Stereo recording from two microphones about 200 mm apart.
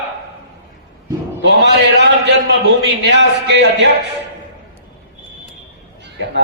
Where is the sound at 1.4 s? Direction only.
60° right (ahead or behind).